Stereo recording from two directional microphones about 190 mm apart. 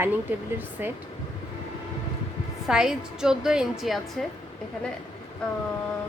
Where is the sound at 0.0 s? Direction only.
10° right (ahead or behind).